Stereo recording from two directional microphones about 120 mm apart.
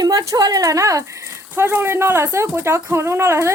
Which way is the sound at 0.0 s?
30° right (ahead or behind).